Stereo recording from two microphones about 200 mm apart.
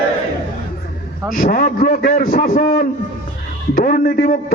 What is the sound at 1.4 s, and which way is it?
A man's voice, 45° left (ahead or behind).